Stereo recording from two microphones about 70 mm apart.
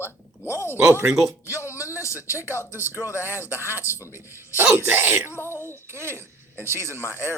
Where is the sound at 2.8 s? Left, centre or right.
Left.